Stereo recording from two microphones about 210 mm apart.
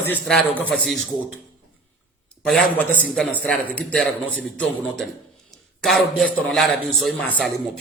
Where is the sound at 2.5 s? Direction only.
5° left (ahead or behind).